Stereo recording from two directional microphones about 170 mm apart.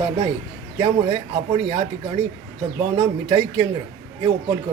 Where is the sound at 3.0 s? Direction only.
25° right (ahead or behind).